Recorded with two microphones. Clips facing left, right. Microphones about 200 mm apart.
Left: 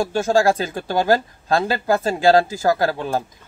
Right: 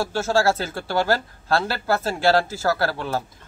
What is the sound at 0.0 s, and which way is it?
Speech, 15° left (ahead or behind).